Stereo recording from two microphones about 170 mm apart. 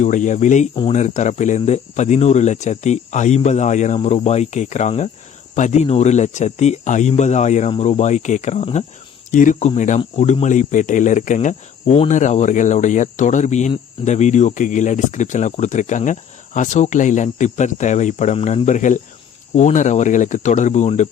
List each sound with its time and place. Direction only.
0.0 s cricket: 45° left (ahead or behind)
7.7 s speech: 40° left (ahead or behind)
9.3 s cricket: 50° left (ahead or behind)